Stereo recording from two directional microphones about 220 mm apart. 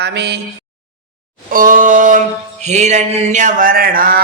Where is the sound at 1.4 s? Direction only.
40° right (ahead or behind).